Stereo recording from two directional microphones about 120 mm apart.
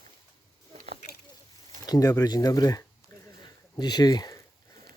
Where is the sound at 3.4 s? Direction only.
35° left (ahead or behind).